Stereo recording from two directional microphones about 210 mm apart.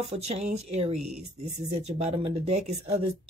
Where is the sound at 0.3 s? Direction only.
30° right (ahead or behind).